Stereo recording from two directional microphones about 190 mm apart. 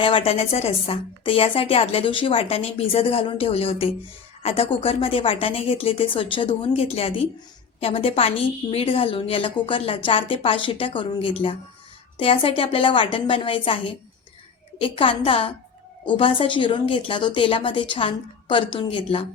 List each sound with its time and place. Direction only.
0.0 s a woman's voice: 30° left (ahead or behind)